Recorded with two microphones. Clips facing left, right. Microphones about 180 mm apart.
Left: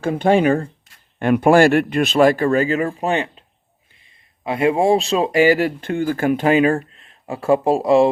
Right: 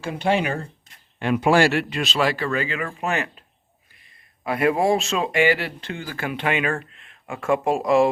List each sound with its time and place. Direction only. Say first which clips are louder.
0.0 s speech: left 7 dB; 50° left (ahead or behind)
2.8 s speech: left 6 dB; 30° left (ahead or behind)
4.4 s speech: left 4 dB; 25° left (ahead or behind)